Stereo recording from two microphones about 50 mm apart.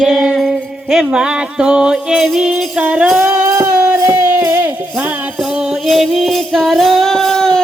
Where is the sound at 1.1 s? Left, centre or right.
Centre.